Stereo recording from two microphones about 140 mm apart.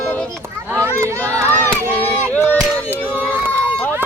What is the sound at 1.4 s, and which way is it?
Crowd, 15° left (ahead or behind).